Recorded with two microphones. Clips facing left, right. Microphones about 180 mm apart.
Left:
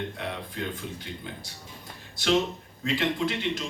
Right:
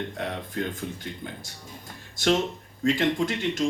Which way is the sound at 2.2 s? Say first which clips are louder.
Right 1 dB; 45° right (ahead or behind).